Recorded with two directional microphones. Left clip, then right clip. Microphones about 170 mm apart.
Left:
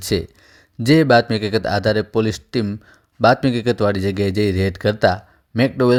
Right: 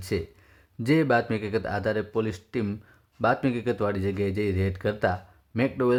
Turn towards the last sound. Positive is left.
turn(degrees=30)  # may be behind; listen again after turning